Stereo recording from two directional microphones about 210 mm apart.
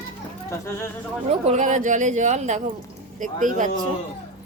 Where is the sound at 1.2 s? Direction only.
35° right (ahead or behind).